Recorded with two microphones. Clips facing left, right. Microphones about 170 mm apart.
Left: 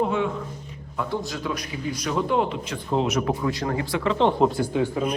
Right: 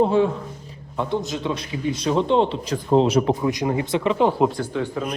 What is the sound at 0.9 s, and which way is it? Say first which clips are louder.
A man's voice: right 4 dB; 20° right (ahead or behind).